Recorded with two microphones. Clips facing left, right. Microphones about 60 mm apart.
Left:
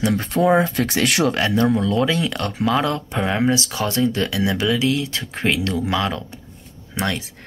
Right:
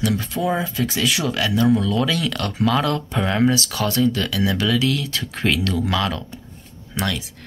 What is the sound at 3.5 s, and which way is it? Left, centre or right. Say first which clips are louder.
Speech: even; left.